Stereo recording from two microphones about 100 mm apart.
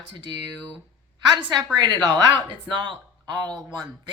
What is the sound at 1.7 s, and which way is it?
Speech, 45° right (ahead or behind).